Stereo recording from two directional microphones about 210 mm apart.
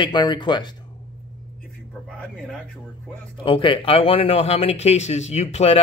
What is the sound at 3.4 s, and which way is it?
Speech, 25° left (ahead or behind).